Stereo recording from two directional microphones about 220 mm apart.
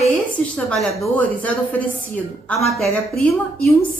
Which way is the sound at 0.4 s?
5° left (ahead or behind).